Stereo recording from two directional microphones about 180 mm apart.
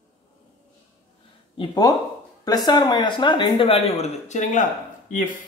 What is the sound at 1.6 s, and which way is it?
Speech, 20° left (ahead or behind).